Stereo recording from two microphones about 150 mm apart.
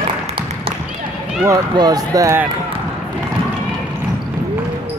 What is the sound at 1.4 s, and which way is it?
Speech, 25° right (ahead or behind).